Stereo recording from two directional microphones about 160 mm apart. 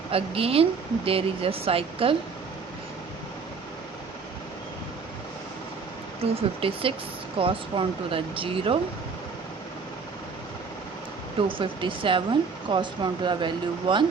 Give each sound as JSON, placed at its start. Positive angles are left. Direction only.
{"t": 0.1, "sound": "speech", "side_deg": -35}
{"t": 6.3, "sound": "speech", "side_deg": -35}
{"t": 11.3, "sound": "speech", "side_deg": -30}